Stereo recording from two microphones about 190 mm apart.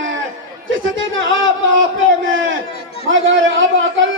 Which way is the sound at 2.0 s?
90° right.